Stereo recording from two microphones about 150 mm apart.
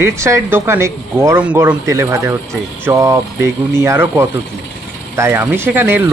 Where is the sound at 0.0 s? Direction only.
20° right (ahead or behind).